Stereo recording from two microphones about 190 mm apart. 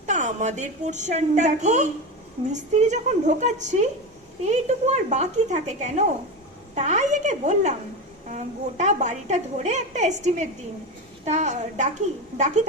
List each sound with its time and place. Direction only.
0.0 s a woman's voice: 40° right (ahead or behind)